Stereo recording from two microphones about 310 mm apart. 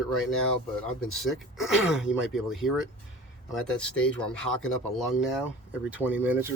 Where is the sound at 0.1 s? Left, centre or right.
Centre.